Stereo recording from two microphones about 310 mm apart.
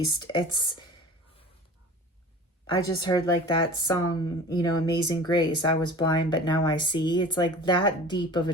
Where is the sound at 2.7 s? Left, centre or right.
Centre.